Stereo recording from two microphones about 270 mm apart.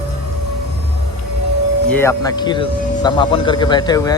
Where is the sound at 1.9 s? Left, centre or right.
Centre.